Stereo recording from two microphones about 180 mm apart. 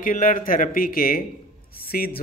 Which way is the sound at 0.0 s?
50° left (ahead or behind).